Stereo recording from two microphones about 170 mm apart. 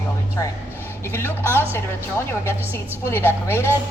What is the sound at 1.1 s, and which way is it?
A woman's voice, 15° left (ahead or behind).